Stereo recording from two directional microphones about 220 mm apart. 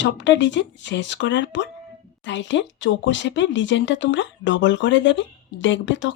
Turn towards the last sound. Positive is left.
turn(degrees=55)  # may be behind; listen again after turning